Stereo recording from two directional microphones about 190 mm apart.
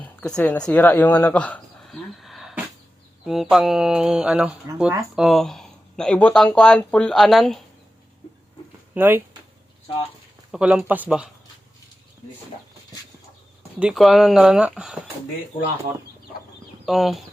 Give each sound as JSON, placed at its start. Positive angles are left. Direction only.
{"t": 0.2, "sound": "speech", "side_deg": 5}
{"t": 9.0, "sound": "speech", "side_deg": -10}
{"t": 9.8, "sound": "speech", "side_deg": 30}
{"t": 10.5, "sound": "speech", "side_deg": -5}
{"t": 13.7, "sound": "speech", "side_deg": -5}
{"t": 16.8, "sound": "speech", "side_deg": 0}